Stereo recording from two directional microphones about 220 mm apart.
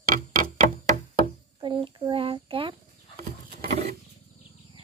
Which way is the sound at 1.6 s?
20° right (ahead or behind).